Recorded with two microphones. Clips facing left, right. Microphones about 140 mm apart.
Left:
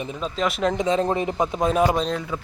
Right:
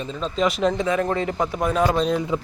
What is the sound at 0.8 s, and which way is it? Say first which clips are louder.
A man's voice: left 1 dB; 25° left (ahead or behind).